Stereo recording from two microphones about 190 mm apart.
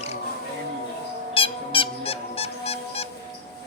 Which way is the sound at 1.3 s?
30° left (ahead or behind).